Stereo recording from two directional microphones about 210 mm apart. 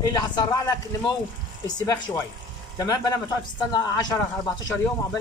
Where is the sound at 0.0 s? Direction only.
20° left (ahead or behind).